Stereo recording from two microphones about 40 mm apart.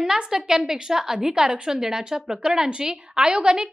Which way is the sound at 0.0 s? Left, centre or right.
Centre.